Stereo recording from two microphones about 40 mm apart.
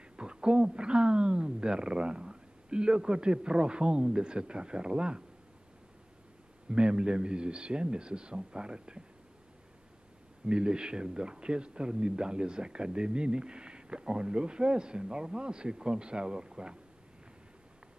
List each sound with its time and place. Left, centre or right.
0.0 s a woman's voice: right
6.7 s speech: right
10.4 s speech: right